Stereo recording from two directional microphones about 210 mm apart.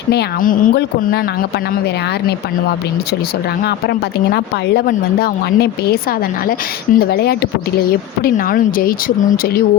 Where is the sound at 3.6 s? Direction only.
50° left (ahead or behind).